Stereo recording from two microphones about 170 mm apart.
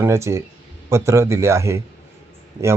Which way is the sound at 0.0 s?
15° right (ahead or behind).